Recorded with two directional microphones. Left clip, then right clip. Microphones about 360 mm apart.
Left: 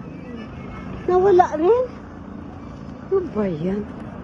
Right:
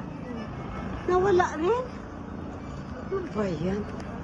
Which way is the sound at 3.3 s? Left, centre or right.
Centre.